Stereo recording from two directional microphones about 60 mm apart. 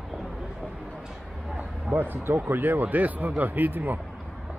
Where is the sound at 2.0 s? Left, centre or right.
Right.